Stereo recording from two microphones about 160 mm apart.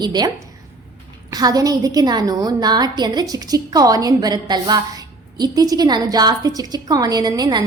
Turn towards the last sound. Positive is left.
turn(degrees=-25)  # may be behind; listen again after turning